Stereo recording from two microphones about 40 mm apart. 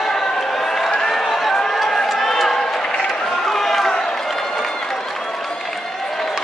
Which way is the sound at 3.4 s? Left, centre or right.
Centre.